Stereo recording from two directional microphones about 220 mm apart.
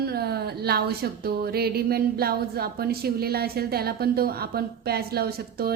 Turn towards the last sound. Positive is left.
turn(degrees=-45)  # may be behind; listen again after turning